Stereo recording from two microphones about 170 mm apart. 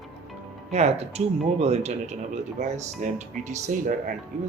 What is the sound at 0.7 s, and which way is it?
Speech, 40° right (ahead or behind).